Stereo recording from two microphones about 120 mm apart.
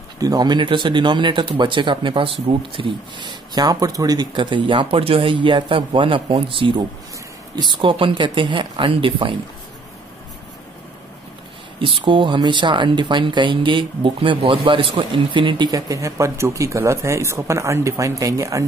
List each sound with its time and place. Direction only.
0.2 s speech: 35° right (ahead or behind)
11.8 s speech: 45° right (ahead or behind); by 18.6 s 25° right (ahead or behind)